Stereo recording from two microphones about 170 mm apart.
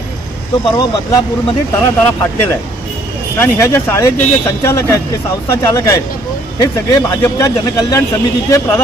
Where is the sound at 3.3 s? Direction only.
15° left (ahead or behind).